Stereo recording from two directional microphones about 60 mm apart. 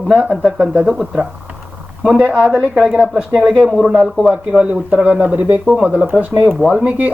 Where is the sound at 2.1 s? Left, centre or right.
Centre.